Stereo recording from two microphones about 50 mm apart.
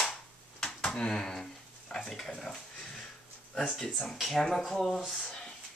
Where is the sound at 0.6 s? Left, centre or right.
Centre.